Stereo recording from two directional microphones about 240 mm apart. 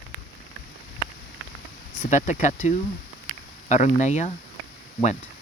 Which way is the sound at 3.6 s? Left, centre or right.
Left.